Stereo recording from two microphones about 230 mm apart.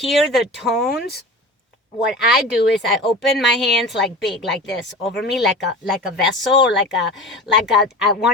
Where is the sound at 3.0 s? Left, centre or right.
Centre.